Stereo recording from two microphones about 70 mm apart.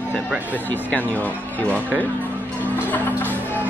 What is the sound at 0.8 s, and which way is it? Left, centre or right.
Speech, left.